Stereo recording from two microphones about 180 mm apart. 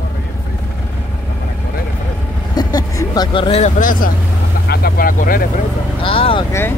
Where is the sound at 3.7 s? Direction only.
45° left (ahead or behind).